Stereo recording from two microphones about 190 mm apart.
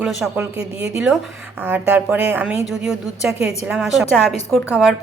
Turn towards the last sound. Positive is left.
turn(degrees=0)  # may be behind; listen again after turning